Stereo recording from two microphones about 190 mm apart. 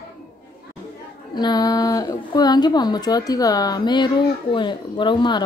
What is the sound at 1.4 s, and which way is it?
A woman's voice, 20° left (ahead or behind).